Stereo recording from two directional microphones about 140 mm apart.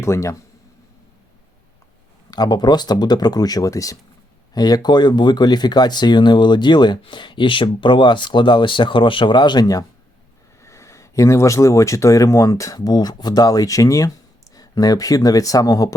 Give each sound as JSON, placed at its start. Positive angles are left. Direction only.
{"t": 0.0, "sound": "speech", "side_deg": 20}
{"t": 2.3, "sound": "speech", "side_deg": 30}